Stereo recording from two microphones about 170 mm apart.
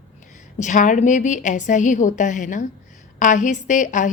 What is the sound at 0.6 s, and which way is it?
A woman's voice, 45° left (ahead or behind).